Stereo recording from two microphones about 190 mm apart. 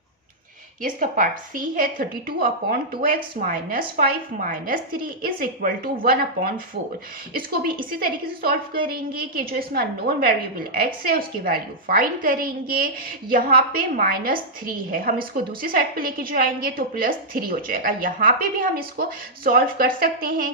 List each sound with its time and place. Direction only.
0.8 s a woman's voice: 45° right (ahead or behind)